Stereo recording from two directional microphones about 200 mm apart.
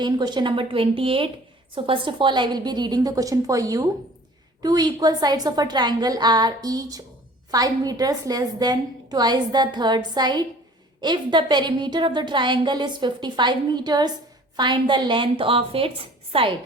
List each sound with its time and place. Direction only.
0.0 s a woman's voice: 20° right (ahead or behind)